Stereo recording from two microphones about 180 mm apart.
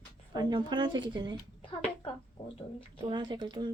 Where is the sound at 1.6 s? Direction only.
30° left (ahead or behind).